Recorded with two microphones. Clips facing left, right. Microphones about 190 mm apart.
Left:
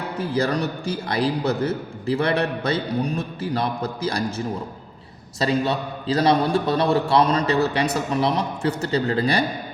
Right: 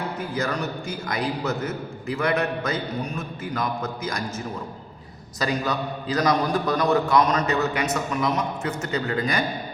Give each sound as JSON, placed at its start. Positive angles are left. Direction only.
{"t": 0.2, "sound": "a man's voice", "side_deg": 35}
{"t": 5.4, "sound": "a man's voice", "side_deg": 30}